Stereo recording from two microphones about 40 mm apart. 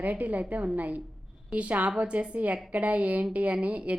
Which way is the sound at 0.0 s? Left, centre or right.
Right.